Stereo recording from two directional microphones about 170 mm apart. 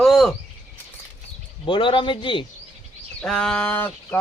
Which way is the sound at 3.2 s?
5° left (ahead or behind).